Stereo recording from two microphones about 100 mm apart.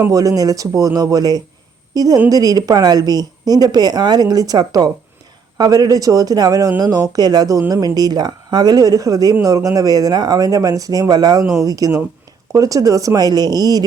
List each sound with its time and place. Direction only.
0.1 s a woman's voice: 35° right (ahead or behind)